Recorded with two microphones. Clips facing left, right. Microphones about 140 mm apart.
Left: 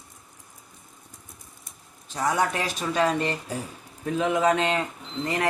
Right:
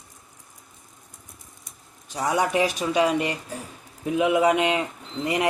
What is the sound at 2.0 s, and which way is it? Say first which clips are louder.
Speech: right 1 dB; 15° right (ahead or behind).